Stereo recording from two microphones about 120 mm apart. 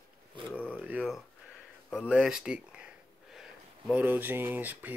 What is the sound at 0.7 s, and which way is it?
Speech, 10° right (ahead or behind).